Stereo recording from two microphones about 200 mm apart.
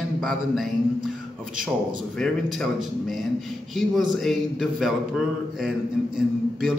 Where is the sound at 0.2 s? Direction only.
Centre (ahead or behind).